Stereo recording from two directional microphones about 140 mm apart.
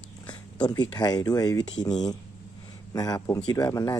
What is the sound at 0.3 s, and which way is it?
Speech, 30° left (ahead or behind).